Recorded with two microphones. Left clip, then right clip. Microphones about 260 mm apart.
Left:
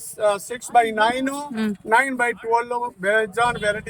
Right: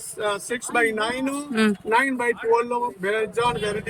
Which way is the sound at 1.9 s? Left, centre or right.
Left.